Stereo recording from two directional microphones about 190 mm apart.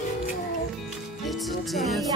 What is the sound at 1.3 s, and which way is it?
Music, centre (ahead or behind).